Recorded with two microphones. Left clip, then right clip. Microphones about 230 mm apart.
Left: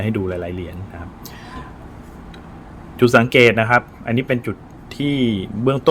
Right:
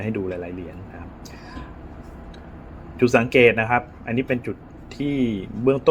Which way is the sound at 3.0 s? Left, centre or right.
Left.